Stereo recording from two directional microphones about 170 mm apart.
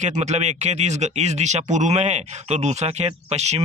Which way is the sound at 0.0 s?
45° right (ahead or behind).